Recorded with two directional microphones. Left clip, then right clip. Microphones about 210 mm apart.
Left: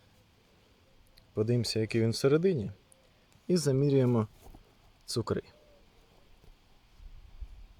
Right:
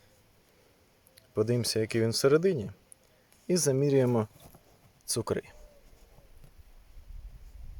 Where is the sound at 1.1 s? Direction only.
5° right (ahead or behind).